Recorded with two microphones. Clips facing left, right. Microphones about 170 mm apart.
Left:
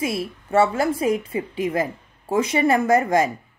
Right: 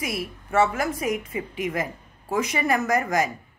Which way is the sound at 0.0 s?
25° left (ahead or behind).